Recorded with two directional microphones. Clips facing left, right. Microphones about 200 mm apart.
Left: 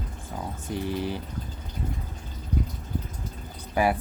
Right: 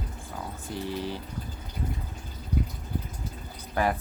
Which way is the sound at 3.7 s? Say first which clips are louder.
Left 3 dB; 10° left (ahead or behind).